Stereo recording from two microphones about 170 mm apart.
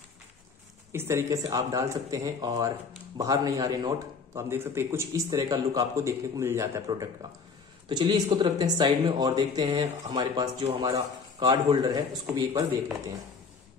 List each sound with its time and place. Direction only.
0.9 s speech: 15° right (ahead or behind)